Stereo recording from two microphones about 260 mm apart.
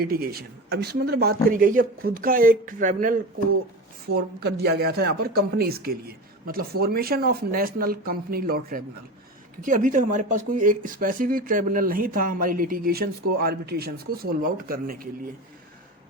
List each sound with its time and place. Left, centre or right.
0.0 s speech: right